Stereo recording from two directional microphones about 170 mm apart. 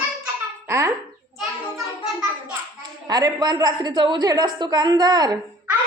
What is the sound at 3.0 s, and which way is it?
A woman's voice, 20° right (ahead or behind).